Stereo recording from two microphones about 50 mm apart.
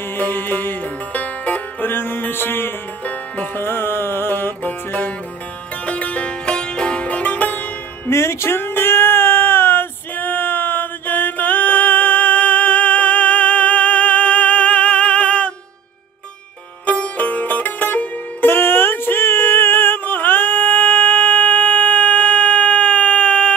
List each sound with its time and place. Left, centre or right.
0.2 s music: left
1.9 s music: left
3.1 s music: left
3.6 s music: left
5.9 s music: left
8.1 s a sound: left
16.8 s music: left